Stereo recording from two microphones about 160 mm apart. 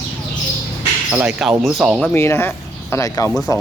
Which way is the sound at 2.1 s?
15° left (ahead or behind).